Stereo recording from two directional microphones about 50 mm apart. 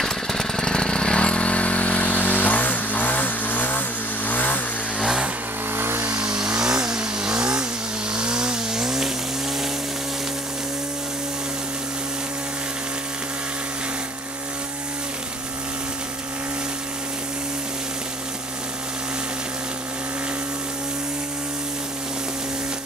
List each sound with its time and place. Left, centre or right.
0.0 s vehicle: centre; by 5.0 s left
5.0 s vehicle: centre
5.8 s vehicle: right
6.1 s vehicle: centre